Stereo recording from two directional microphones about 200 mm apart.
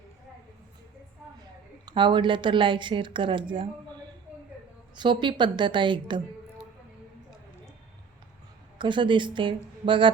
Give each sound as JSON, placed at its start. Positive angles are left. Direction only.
{"t": 1.8, "sound": "speech", "side_deg": -20}
{"t": 4.9, "sound": "speech", "side_deg": -25}
{"t": 8.8, "sound": "speech", "side_deg": -25}